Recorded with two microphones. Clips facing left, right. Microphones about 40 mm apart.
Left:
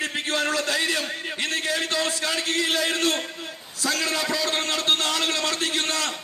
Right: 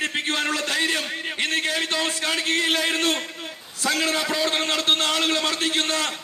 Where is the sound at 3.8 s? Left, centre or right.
Right.